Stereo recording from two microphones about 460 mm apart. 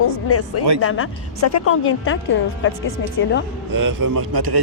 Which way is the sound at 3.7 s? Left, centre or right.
Right.